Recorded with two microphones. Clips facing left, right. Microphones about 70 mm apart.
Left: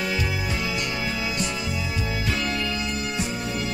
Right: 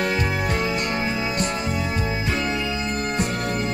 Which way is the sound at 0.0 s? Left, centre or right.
Right.